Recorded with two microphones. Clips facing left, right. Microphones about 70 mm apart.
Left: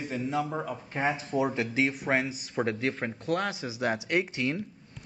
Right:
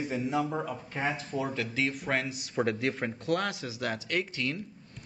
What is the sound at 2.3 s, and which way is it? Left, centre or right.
Speech, centre.